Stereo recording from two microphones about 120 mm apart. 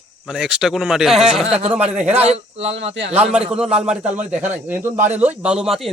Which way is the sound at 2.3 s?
60° right (ahead or behind).